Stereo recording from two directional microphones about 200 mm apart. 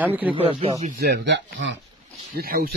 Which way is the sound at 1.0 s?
60° right (ahead or behind).